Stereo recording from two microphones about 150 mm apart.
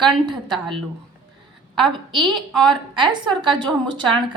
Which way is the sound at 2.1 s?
30° right (ahead or behind).